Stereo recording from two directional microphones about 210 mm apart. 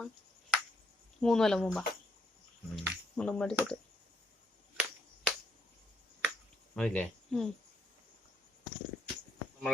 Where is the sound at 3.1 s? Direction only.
5° left (ahead or behind).